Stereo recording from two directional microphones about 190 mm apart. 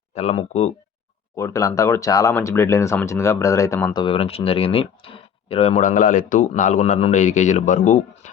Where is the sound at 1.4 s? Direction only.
15° left (ahead or behind).